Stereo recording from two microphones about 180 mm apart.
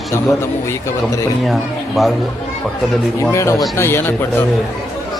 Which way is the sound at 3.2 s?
15° left (ahead or behind).